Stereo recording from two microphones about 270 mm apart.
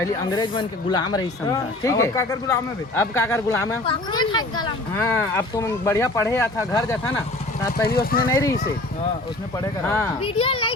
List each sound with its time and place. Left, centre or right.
0.0 s speech: centre
7.9 s speech: left
8.3 s speech: centre
9.8 s speech: centre
10.2 s a child's voice: centre